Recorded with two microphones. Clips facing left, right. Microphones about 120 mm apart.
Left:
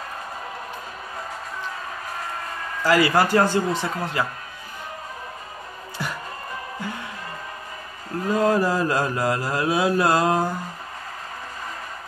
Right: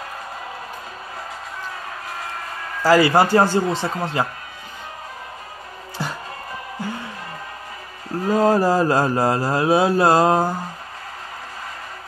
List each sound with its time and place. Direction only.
2.8 s speech: 30° right (ahead or behind)
6.0 s music: 30° right (ahead or behind)
8.3 s mantra: 35° right (ahead or behind)